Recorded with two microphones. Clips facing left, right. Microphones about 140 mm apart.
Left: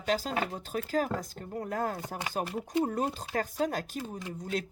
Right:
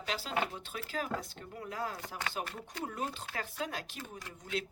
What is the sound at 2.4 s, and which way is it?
Speech, 15° left (ahead or behind).